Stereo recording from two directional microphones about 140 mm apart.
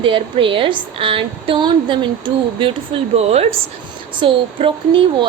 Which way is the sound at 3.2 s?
50° right (ahead or behind).